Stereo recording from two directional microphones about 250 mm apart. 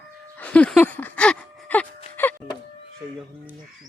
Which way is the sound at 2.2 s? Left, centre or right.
Centre.